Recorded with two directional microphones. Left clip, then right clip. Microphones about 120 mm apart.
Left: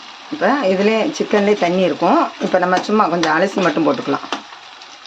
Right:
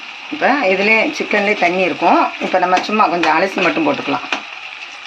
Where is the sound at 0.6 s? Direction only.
65° left (ahead or behind).